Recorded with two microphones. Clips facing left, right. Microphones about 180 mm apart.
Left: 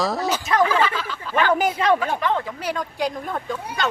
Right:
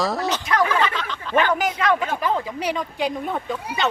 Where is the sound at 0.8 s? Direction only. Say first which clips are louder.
Left 1 dB; 5° left (ahead or behind).